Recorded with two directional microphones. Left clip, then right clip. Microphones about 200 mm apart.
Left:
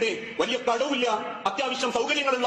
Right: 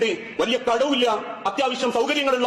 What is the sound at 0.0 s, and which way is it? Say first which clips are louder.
A man's voice: right 3 dB; 40° right (ahead or behind).